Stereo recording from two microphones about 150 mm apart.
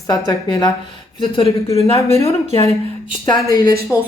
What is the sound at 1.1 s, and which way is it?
Speech, 35° left (ahead or behind).